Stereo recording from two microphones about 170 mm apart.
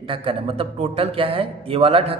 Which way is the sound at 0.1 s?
35° right (ahead or behind).